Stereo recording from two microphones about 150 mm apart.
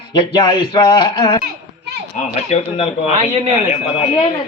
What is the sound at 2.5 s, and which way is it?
Speech, 40° left (ahead or behind).